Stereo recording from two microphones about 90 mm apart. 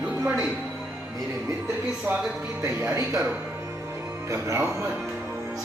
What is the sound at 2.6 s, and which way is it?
Speech, 30° right (ahead or behind).